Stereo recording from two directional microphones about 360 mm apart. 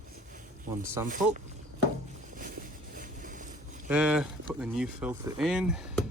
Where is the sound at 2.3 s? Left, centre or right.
Right.